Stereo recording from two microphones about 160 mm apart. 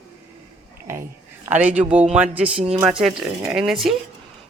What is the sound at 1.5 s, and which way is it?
Speech, 10° right (ahead or behind).